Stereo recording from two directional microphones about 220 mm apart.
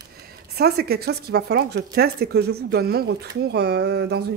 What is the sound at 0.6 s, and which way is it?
Speech, 45° right (ahead or behind).